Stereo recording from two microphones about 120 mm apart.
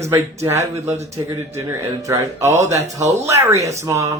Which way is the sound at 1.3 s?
20° right (ahead or behind).